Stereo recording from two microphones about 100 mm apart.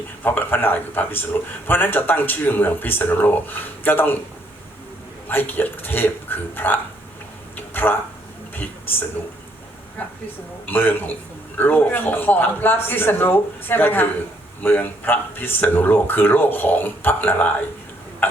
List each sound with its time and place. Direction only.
0.2 s a man's voice: 20° left (ahead or behind)
5.3 s a man's voice: 20° left (ahead or behind)
7.5 s a sound: 20° left (ahead or behind)
8.5 s a man's voice: 20° left (ahead or behind)
10.7 s a man's voice: 20° left (ahead or behind)
18.2 s hiccup: 20° left (ahead or behind)